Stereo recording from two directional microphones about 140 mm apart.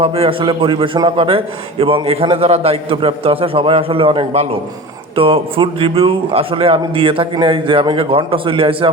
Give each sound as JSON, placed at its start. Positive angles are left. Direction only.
{"t": 0.0, "sound": "a man's voice", "side_deg": -40}